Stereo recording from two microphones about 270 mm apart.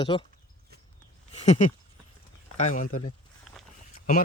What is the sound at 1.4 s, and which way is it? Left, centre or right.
Speech, left.